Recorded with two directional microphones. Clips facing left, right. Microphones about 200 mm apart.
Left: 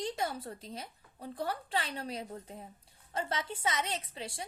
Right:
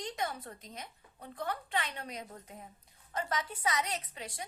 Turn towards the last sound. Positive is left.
turn(degrees=30)  # may be behind; listen again after turning